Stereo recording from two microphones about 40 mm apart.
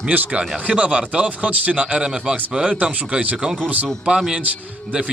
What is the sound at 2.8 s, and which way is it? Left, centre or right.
Speech, right.